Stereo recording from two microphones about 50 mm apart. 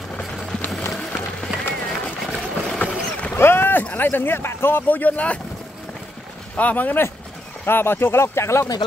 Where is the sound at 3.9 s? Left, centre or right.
Left.